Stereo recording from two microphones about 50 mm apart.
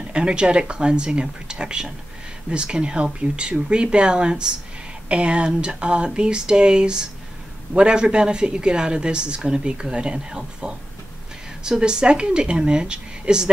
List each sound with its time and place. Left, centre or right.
0.1 s a woman's voice: centre